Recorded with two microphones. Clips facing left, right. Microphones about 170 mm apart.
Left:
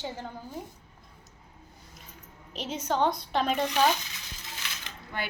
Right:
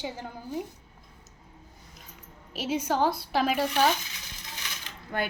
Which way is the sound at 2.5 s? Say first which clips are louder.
Right 3 dB; 10° right (ahead or behind).